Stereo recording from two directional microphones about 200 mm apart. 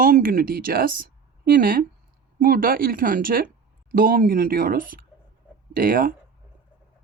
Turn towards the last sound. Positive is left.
turn(degrees=-45)  # may be behind; listen again after turning